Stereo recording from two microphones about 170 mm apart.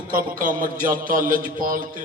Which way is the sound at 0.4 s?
50° right (ahead or behind).